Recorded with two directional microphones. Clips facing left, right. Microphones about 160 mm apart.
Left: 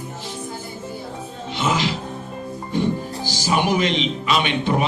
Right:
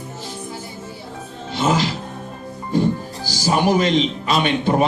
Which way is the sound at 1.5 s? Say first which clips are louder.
Right 3 dB; 40° right (ahead or behind).